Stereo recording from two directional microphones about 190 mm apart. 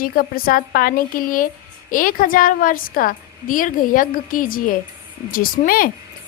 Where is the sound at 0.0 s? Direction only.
50° left (ahead or behind).